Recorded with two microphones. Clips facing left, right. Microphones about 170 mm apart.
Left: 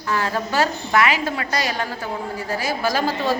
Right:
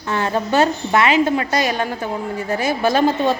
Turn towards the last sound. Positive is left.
turn(degrees=-25)  # may be behind; listen again after turning